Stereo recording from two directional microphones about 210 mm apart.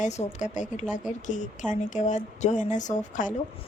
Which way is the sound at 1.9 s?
35° left (ahead or behind).